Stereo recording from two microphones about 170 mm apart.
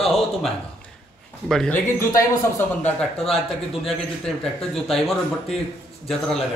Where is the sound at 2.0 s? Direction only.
20° left (ahead or behind).